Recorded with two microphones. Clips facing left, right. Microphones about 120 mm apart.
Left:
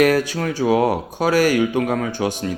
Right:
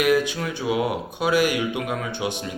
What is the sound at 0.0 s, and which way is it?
Speech, 40° left (ahead or behind).